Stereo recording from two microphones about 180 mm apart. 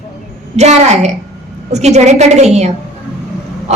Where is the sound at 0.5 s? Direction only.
40° right (ahead or behind).